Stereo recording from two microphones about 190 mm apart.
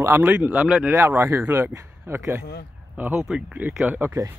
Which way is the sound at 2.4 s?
55° left (ahead or behind).